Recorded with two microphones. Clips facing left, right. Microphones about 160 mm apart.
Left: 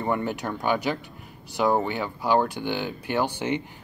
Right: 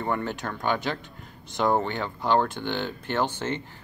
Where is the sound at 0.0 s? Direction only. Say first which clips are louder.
Left 2 dB; 15° left (ahead or behind).